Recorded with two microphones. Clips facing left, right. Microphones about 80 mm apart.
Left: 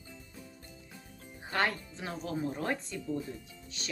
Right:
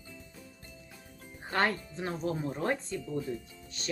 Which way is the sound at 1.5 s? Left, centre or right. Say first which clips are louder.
Right 2 dB; right.